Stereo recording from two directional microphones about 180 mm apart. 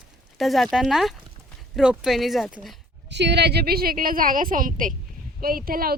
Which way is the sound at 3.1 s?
70° right (ahead or behind).